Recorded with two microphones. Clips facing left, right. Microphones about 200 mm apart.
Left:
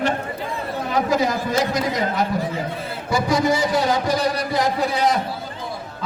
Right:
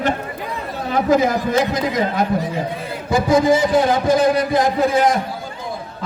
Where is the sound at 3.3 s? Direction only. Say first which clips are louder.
Right 6 dB; 50° right (ahead or behind).